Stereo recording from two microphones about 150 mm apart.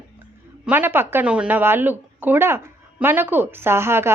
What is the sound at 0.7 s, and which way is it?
A woman's voice, 15° right (ahead or behind).